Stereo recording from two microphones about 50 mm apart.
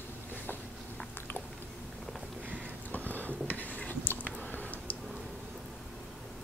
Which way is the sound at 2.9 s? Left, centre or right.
Left.